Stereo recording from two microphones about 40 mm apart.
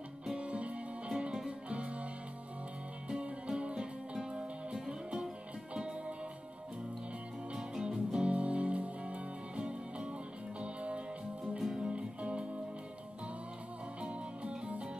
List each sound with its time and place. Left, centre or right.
0.4 s music: right
3.2 s music: right
7.5 s music: centre
11.5 s music: centre
12.0 s music: right
14.0 s music: right